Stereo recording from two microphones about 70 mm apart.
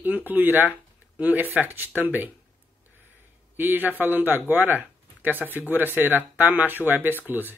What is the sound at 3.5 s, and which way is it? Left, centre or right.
Speech, right.